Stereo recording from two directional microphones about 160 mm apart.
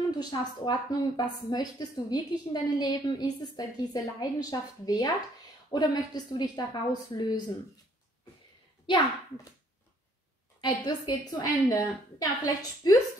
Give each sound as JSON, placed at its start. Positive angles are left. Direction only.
{"t": 0.1, "sound": "a woman's voice", "side_deg": 25}
{"t": 8.8, "sound": "a child's voice", "side_deg": 30}
{"t": 10.6, "sound": "a woman's voice", "side_deg": 25}